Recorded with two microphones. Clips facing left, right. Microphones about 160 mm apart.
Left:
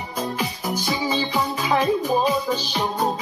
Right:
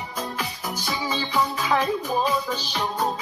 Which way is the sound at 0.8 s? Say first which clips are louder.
Left 4 dB; 15° left (ahead or behind).